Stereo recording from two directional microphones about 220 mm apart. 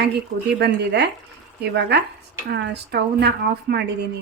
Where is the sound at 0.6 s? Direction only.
50° right (ahead or behind).